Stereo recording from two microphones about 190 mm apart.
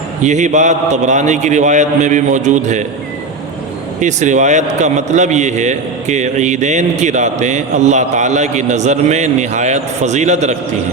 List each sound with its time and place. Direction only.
0.2 s a man's voice: 40° right (ahead or behind)
4.0 s a man's voice: 40° right (ahead or behind)